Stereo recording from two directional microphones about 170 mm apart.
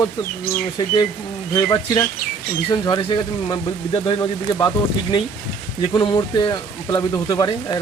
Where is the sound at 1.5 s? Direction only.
20° left (ahead or behind).